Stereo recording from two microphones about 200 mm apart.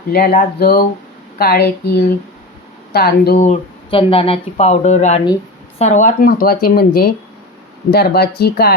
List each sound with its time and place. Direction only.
0.1 s speech: 50° left (ahead or behind)
2.9 s speech: 50° left (ahead or behind)
3.4 s speech: 30° left (ahead or behind); by 8.7 s 50° left (ahead or behind)